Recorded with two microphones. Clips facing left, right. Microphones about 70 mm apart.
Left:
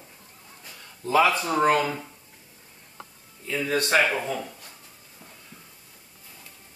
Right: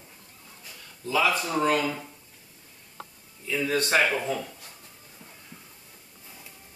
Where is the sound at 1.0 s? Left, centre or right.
Left.